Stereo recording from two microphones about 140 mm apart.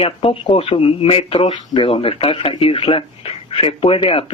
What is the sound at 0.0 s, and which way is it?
Speech, 40° left (ahead or behind).